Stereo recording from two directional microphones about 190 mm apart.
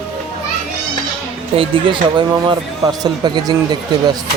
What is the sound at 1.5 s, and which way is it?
Speech, 25° right (ahead or behind).